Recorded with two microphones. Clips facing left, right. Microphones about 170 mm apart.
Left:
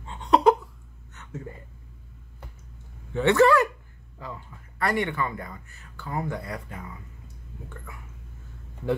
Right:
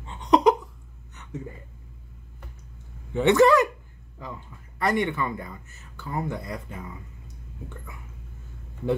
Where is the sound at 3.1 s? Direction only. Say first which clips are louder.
Right 1 dB; 20° right (ahead or behind).